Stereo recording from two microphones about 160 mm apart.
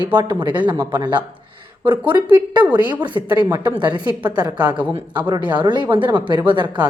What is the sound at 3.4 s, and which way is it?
Speech, 25° right (ahead or behind).